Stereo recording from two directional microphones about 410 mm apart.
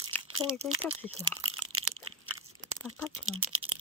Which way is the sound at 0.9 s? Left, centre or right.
Right.